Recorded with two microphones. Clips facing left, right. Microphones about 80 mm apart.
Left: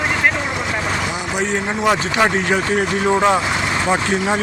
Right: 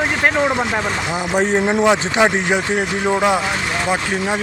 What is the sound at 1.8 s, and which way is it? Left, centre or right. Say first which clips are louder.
Speech: left 1 dB; centre.